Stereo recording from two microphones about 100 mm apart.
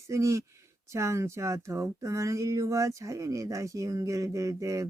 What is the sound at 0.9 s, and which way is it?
Speech, 30° right (ahead or behind).